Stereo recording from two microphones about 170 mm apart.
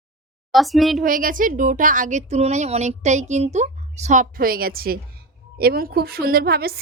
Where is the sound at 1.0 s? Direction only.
55° right (ahead or behind).